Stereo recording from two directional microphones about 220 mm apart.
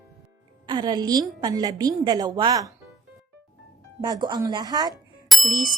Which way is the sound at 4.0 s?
20° right (ahead or behind).